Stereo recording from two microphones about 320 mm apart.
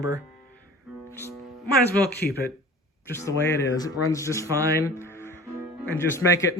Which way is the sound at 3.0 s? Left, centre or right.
Centre.